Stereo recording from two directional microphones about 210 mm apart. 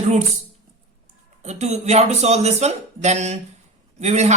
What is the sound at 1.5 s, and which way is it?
A man's voice, 30° right (ahead or behind).